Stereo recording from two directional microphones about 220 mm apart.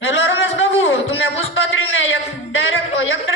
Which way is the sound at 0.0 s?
60° left (ahead or behind).